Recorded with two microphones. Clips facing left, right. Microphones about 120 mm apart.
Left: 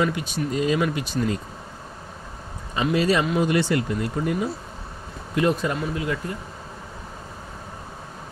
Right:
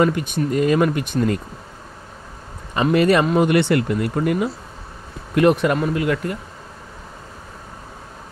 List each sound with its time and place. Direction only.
0.0 s speech: 55° right (ahead or behind)
2.7 s speech: 60° right (ahead or behind)